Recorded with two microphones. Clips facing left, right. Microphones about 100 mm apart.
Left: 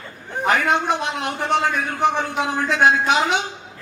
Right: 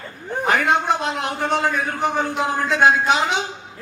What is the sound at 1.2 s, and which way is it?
Speech, 40° right (ahead or behind).